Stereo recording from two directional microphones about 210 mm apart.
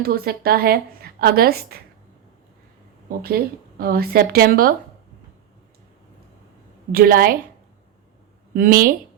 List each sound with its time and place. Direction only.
0.0 s a woman's voice: 45° right (ahead or behind)
3.1 s a woman's voice: 45° right (ahead or behind)
6.9 s a woman's voice: 45° right (ahead or behind)
8.5 s a woman's voice: 40° right (ahead or behind)